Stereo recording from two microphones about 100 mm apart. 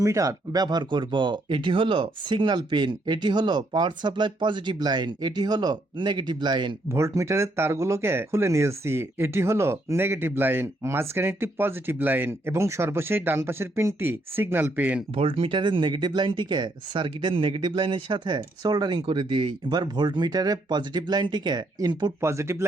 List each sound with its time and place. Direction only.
0.0 s speech: 35° right (ahead or behind); by 6.7 s 50° right (ahead or behind)
6.8 s speech: 30° right (ahead or behind)
15.1 s speech: 70° right (ahead or behind); by 22.1 s 45° right (ahead or behind)
22.2 s speech: 30° right (ahead or behind)